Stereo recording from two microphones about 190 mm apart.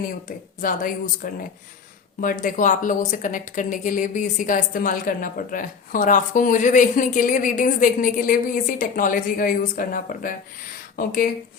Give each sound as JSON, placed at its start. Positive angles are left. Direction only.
{"t": 0.6, "sound": "speech", "side_deg": 45}